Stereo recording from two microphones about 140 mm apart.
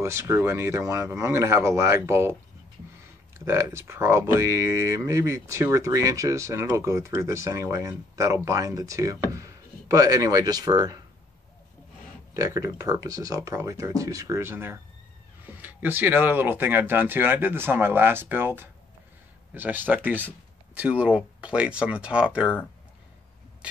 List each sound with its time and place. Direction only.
0.0 s speech: 20° right (ahead or behind)
3.3 s speech: 20° right (ahead or behind)
12.4 s speech: 20° right (ahead or behind); by 22.5 s 5° right (ahead or behind)